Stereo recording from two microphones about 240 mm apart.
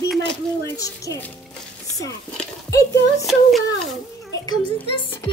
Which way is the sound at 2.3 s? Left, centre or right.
Centre.